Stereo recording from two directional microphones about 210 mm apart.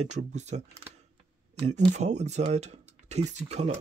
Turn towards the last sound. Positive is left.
turn(degrees=-30)  # may be behind; listen again after turning